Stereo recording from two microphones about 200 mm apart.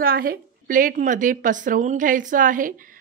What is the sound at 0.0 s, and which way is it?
Speech, 50° right (ahead or behind).